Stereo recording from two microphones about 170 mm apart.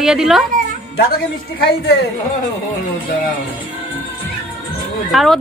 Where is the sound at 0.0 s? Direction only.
Centre (ahead or behind).